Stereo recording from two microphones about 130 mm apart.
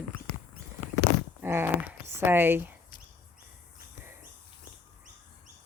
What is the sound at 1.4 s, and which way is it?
Speech, 15° right (ahead or behind).